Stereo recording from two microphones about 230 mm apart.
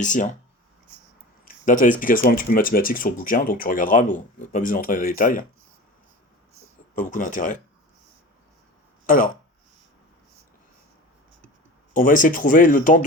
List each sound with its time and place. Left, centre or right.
0.0 s speech: left
1.6 s speech: left
6.9 s speech: left
9.0 s speech: left
11.9 s speech: left